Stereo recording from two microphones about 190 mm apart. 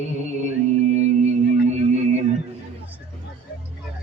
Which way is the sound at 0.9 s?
35° right (ahead or behind).